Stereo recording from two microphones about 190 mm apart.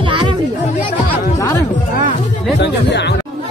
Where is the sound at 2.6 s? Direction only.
65° left (ahead or behind).